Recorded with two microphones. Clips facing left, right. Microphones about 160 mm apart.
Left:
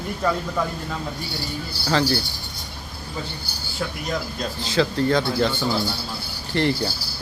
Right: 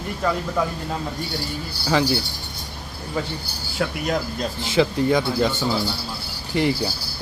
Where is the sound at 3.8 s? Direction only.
70° right (ahead or behind).